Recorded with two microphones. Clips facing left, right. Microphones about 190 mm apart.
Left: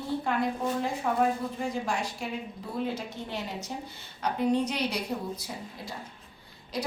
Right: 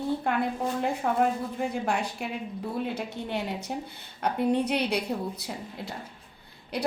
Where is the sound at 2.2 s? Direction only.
60° right (ahead or behind).